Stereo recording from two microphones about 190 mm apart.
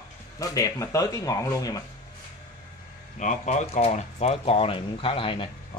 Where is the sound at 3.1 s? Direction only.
40° left (ahead or behind).